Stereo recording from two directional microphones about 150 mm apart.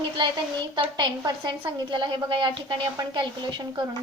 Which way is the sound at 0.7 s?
30° right (ahead or behind).